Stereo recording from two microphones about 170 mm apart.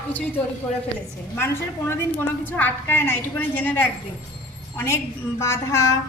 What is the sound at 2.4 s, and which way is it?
A woman's voice, 10° left (ahead or behind).